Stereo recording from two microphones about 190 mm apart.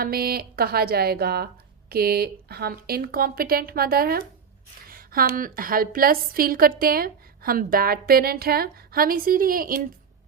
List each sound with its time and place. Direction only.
0.0 s a woman's voice: 50° right (ahead or behind)